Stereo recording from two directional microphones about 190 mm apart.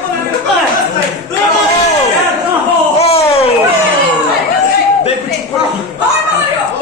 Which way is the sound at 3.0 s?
30° left (ahead or behind).